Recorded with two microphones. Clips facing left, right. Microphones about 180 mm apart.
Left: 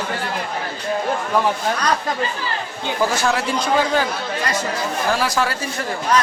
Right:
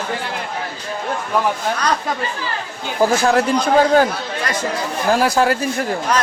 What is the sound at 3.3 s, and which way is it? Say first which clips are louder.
Speech: right 5 dB; 55° right (ahead or behind).